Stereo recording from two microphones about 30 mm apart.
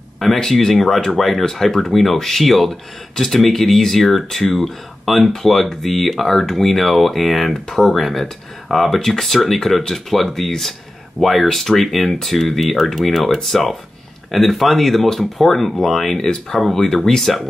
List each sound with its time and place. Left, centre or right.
0.5 s speech: centre
1.4 s speech: centre